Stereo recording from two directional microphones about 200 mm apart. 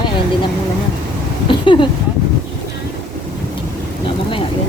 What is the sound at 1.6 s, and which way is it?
Speech, 25° left (ahead or behind).